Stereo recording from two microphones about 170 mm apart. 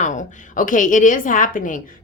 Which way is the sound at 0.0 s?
45° left (ahead or behind).